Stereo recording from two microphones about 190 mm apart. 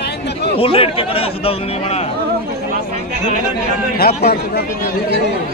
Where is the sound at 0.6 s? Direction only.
30° left (ahead or behind).